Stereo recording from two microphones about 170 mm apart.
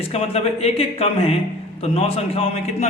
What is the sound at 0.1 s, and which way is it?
A man's voice, 35° left (ahead or behind).